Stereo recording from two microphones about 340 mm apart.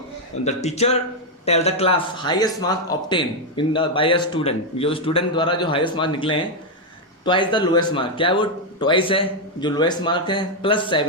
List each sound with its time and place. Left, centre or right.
0.4 s a man's voice: centre